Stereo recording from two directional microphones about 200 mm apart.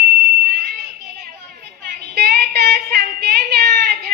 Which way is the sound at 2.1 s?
50° right (ahead or behind).